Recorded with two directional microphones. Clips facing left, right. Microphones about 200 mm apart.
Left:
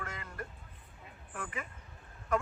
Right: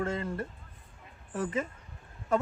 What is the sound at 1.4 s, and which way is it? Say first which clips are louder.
Speech: right 12 dB; 25° right (ahead or behind).